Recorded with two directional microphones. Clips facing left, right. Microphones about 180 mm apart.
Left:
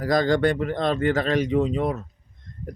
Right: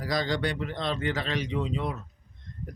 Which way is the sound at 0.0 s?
50° left (ahead or behind).